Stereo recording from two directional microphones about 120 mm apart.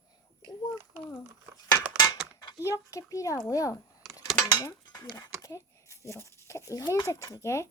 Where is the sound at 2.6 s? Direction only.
25° left (ahead or behind).